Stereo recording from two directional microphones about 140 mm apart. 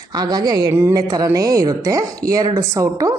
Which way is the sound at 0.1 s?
30° right (ahead or behind).